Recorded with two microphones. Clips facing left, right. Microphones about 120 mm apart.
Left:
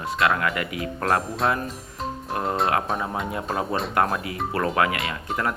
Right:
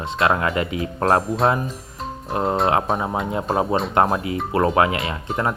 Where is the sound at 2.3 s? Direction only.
25° right (ahead or behind).